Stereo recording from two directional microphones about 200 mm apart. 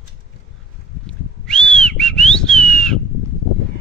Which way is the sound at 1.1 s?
5° left (ahead or behind).